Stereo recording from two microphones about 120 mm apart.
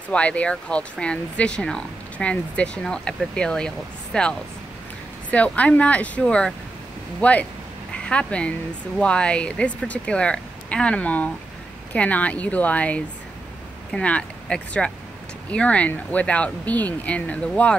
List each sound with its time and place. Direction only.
0.1 s speech: 10° left (ahead or behind)